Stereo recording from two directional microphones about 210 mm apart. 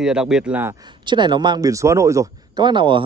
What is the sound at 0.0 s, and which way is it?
A man's voice, 5° right (ahead or behind).